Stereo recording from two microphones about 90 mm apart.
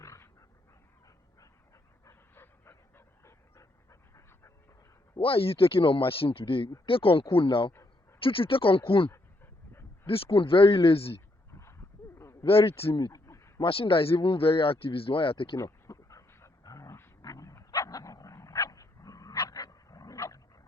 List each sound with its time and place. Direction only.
0.0 s dog: 35° left (ahead or behind)
2.0 s dog: 25° left (ahead or behind)
5.2 s speech: 90° left; by 7.7 s 70° left (ahead or behind)
8.2 s speech: 80° left
9.1 s dog: 25° left (ahead or behind)
10.1 s speech: 85° left
12.5 s speech: 90° left
13.0 s a sound: 40° left (ahead or behind)
13.6 s speech: 80° left
15.5 s dog: 35° left (ahead or behind)